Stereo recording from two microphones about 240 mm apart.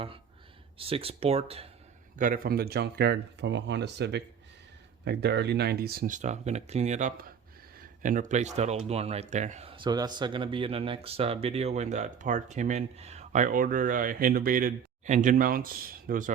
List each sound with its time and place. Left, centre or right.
0.8 s speech: right
2.1 s speech: right